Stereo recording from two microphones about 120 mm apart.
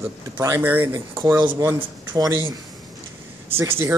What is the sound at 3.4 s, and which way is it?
Speech, 20° right (ahead or behind).